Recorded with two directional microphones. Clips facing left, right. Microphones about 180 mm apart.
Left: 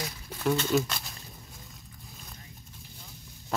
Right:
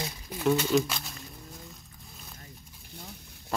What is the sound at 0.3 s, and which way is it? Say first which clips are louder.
Speech: right 2 dB; 5° right (ahead or behind).